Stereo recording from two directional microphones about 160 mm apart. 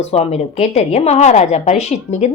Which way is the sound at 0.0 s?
40° left (ahead or behind).